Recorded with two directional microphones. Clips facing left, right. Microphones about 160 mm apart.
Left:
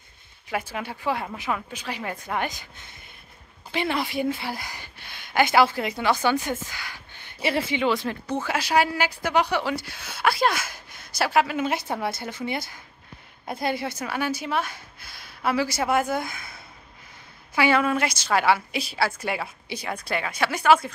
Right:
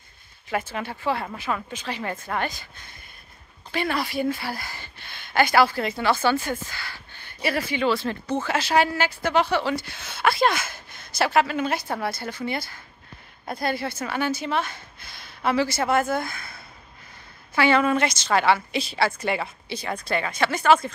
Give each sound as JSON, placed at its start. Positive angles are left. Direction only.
{"t": 0.5, "sound": "speech", "side_deg": 10}
{"t": 17.6, "sound": "speech", "side_deg": 5}